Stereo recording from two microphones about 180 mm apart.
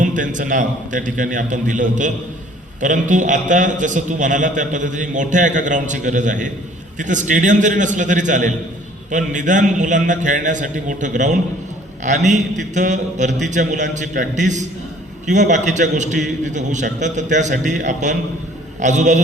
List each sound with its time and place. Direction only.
0.0 s a man's voice: 45° right (ahead or behind)